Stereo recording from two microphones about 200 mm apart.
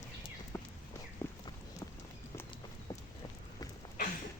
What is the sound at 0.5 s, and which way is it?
Clip-clop, 15° left (ahead or behind).